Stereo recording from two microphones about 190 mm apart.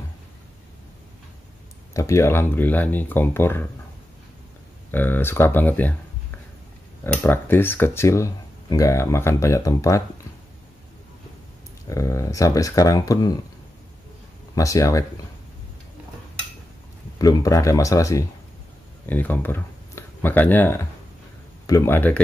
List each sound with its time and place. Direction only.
2.0 s speech: 15° left (ahead or behind)
4.9 s speech: 10° left (ahead or behind)
7.0 s speech: 10° left (ahead or behind)
11.9 s speech: 15° left (ahead or behind)
14.5 s speech: 15° left (ahead or behind)
17.2 s speech: 20° left (ahead or behind)